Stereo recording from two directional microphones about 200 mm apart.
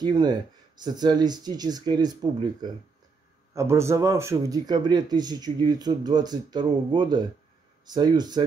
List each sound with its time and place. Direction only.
0.0 s speech: 20° right (ahead or behind)
3.5 s speech: 15° right (ahead or behind)